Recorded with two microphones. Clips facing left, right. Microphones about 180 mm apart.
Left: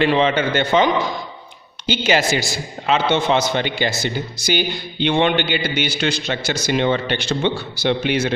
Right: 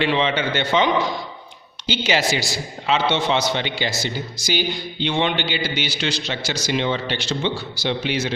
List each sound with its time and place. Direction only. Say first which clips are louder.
0.0 s a man's voice: left 4 dB; 45° left (ahead or behind)
1.9 s a man's voice: left 3 dB; 50° left (ahead or behind)